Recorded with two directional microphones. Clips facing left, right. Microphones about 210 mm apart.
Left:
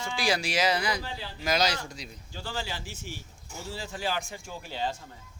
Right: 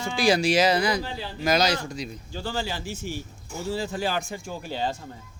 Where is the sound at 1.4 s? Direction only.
45° right (ahead or behind).